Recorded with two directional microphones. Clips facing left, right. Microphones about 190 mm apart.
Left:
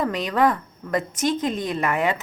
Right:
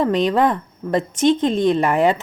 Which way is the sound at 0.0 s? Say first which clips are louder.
Right 4 dB; 30° right (ahead or behind).